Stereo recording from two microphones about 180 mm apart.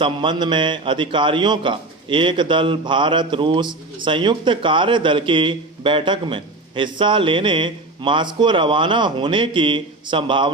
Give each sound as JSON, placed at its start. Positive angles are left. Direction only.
{"t": 0.0, "sound": "a man's voice", "side_deg": -25}